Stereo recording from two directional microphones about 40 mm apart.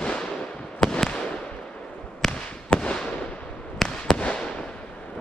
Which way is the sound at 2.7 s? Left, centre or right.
Left.